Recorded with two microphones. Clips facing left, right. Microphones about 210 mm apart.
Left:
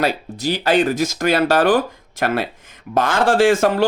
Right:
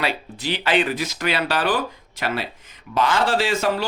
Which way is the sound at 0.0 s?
45° left (ahead or behind).